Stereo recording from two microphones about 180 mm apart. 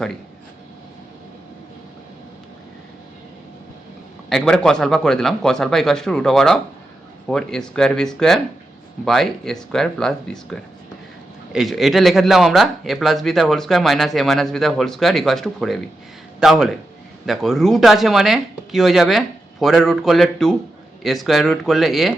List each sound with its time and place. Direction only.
4.3 s speech: 5° left (ahead or behind)